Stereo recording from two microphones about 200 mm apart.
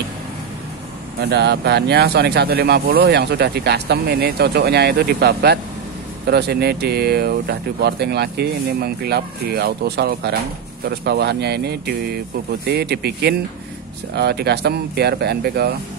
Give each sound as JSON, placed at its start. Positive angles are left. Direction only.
{"t": 1.2, "sound": "speech", "side_deg": -55}